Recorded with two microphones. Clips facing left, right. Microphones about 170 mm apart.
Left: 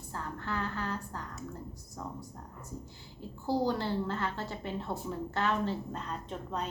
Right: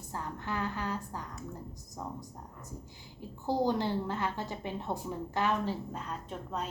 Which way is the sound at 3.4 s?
20° right (ahead or behind).